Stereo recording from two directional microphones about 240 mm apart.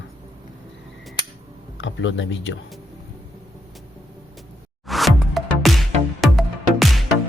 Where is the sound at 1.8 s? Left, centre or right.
Left.